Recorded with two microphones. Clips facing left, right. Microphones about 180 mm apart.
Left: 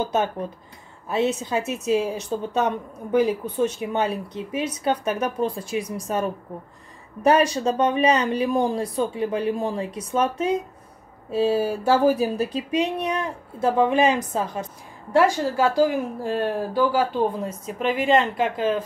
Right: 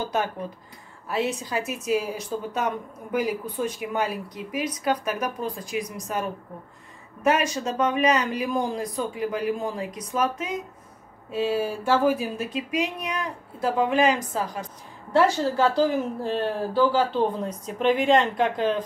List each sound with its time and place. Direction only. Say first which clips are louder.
0.0 s a woman's voice: left 3 dB; 20° left (ahead or behind)
7.2 s a woman's voice: left 5 dB; 35° left (ahead or behind)
15.1 s speech: left 1 dB; 10° left (ahead or behind)